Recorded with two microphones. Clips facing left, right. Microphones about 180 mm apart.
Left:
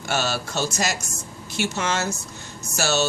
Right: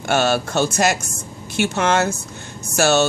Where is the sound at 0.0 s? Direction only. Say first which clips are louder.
Right 7 dB; 55° right (ahead or behind).